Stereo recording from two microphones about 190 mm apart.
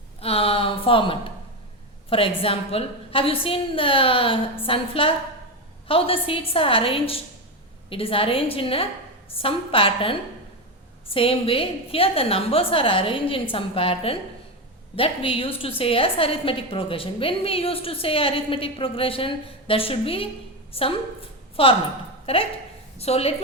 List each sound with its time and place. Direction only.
0.2 s a woman's voice: 30° left (ahead or behind)